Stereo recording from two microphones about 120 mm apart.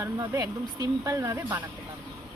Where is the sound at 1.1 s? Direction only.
20° right (ahead or behind).